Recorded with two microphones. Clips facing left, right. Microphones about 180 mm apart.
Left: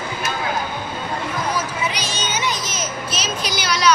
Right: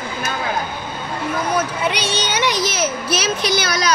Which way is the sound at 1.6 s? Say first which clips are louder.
Right 4 dB; 60° right (ahead or behind).